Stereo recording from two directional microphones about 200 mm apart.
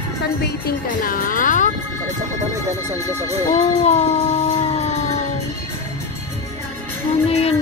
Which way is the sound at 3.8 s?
35° left (ahead or behind).